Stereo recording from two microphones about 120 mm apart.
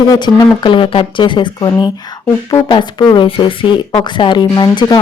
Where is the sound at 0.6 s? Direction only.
45° left (ahead or behind).